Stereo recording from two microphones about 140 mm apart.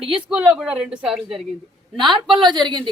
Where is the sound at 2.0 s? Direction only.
35° right (ahead or behind).